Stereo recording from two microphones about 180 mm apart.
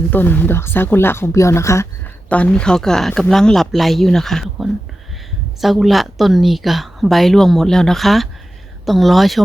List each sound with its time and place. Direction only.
0.1 s a woman's voice: 10° left (ahead or behind)